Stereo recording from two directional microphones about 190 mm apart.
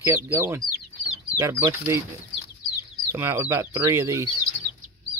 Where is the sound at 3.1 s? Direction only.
15° right (ahead or behind).